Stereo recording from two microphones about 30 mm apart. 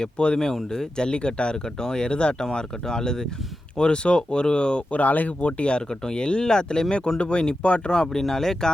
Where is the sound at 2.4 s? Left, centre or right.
Left.